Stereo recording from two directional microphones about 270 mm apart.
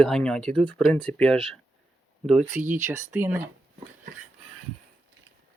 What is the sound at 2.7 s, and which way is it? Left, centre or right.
Speech, centre.